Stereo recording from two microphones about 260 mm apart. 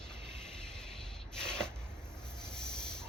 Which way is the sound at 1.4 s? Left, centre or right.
Centre.